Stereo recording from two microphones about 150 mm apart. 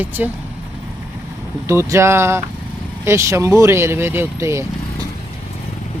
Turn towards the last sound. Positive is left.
turn(degrees=-20)  # may be behind; listen again after turning